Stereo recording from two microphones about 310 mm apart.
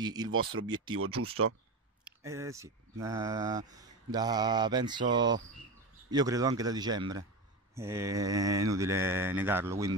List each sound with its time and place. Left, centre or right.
0.0 s speech: centre
0.3 s speech: right
2.0 s speech: centre